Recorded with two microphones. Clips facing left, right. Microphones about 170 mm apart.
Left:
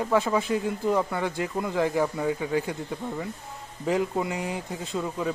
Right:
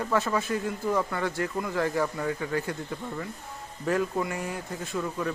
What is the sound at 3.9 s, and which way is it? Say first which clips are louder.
Speech: left 1 dB; 20° left (ahead or behind).